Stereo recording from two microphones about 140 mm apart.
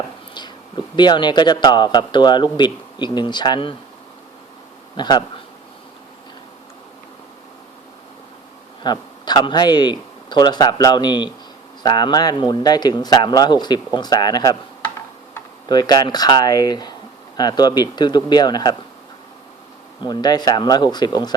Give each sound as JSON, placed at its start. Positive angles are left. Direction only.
{"t": 0.9, "sound": "speech", "side_deg": 30}
{"t": 4.9, "sound": "speech", "side_deg": 30}
{"t": 8.8, "sound": "speech", "side_deg": 30}
{"t": 15.7, "sound": "speech", "side_deg": 30}
{"t": 20.0, "sound": "speech", "side_deg": 30}